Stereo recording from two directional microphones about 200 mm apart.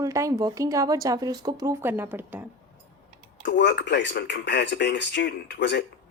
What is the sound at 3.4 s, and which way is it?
Speech, 60° left (ahead or behind).